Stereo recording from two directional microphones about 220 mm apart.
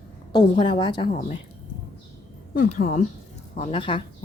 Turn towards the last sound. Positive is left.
turn(degrees=25)  # may be behind; listen again after turning